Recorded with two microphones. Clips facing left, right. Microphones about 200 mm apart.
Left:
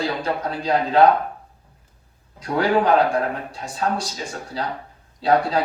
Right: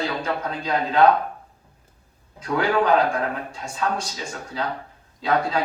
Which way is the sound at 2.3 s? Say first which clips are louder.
Left 2 dB; 35° left (ahead or behind).